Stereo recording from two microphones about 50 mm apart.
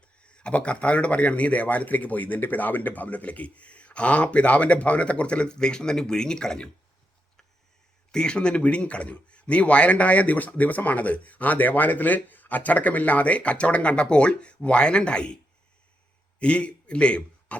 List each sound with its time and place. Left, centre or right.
0.2 s speech: left
8.1 s speech: centre
16.4 s a man's voice: left